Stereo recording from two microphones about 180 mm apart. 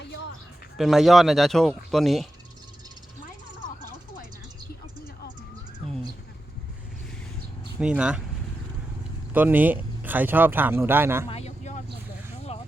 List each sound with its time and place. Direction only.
0.8 s speech: centre (ahead or behind)
7.8 s speech: 5° right (ahead or behind)
9.3 s speech: 10° right (ahead or behind)
11.3 s vehicle: 35° left (ahead or behind)